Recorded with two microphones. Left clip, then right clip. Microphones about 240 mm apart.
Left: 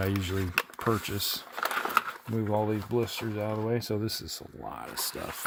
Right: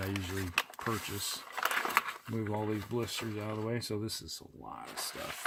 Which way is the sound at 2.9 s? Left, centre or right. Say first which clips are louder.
Left 6 dB; left.